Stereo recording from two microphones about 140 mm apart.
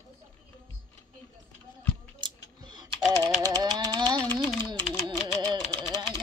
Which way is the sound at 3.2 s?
30° right (ahead or behind).